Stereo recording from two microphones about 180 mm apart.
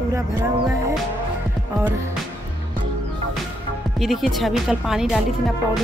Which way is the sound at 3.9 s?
Centre (ahead or behind).